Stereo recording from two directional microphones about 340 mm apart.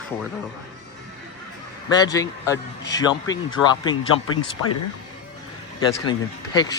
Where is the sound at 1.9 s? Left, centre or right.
Centre.